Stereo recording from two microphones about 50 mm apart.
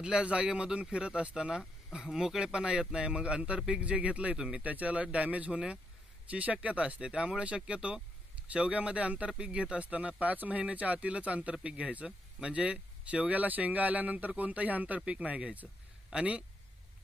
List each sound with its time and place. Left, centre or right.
0.0 s speech: centre
4.6 s speech: right